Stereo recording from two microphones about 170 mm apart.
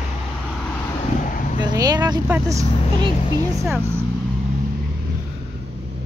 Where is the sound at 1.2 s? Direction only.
50° left (ahead or behind).